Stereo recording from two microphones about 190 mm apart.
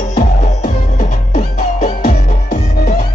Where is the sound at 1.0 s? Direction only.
40° left (ahead or behind).